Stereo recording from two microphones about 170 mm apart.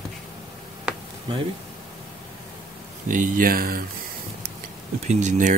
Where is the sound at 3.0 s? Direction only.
50° right (ahead or behind).